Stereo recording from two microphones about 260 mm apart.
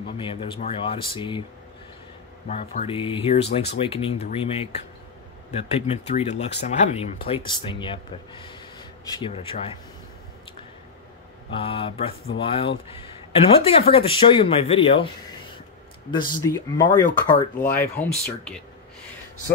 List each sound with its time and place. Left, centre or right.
0.2 s speech: centre
2.4 s speech: left
11.5 s speech: left; by 18.6 s centre